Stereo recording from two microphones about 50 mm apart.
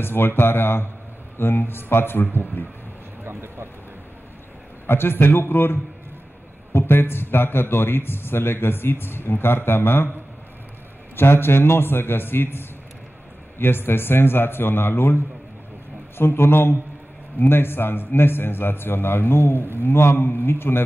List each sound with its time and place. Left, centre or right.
0.0 s a man's voice: left
3.3 s speech: right
4.8 s a man's voice: left
11.1 s a man's voice: left